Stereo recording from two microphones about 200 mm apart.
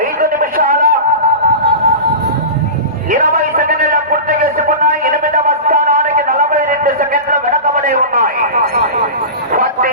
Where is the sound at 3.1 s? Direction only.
45° right (ahead or behind).